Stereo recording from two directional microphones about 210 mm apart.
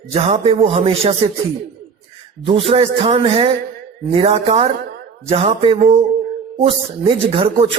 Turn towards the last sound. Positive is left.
turn(degrees=-25)  # may be behind; listen again after turning